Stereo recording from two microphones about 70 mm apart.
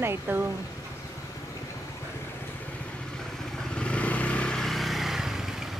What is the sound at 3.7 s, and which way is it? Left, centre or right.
Vehicle, centre.